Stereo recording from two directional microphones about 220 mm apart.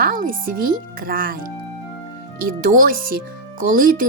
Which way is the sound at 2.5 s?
40° right (ahead or behind).